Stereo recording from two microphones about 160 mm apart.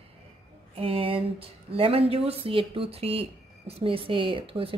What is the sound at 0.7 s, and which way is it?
Speech, 35° right (ahead or behind).